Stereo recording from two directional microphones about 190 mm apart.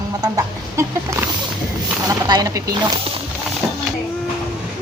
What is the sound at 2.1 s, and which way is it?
Speech, 20° right (ahead or behind).